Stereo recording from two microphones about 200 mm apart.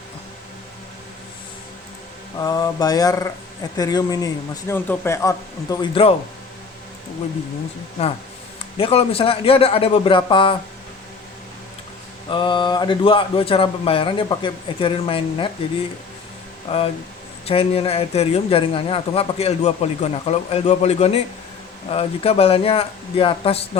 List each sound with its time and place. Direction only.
2.4 s a man's voice: 20° left (ahead or behind)
8.8 s speech: 30° left (ahead or behind)
12.3 s speech: 25° left (ahead or behind)
16.7 s speech: 30° left (ahead or behind)